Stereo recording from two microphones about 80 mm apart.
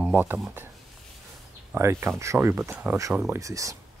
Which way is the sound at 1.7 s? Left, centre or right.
Right.